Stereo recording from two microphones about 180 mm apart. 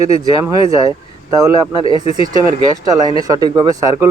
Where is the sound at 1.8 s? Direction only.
30° left (ahead or behind).